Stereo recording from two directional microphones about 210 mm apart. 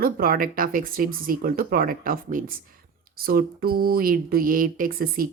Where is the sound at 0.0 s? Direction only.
45° right (ahead or behind).